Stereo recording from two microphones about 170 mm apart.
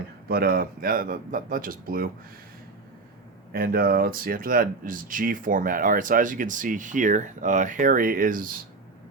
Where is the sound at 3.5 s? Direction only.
60° right (ahead or behind).